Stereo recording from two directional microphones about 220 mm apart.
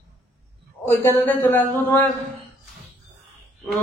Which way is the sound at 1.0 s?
10° left (ahead or behind).